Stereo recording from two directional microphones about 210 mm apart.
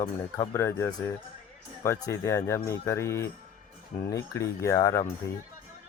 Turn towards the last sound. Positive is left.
turn(degrees=15)  # may be behind; listen again after turning